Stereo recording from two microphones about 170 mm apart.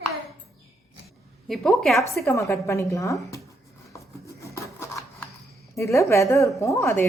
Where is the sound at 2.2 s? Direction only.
15° left (ahead or behind).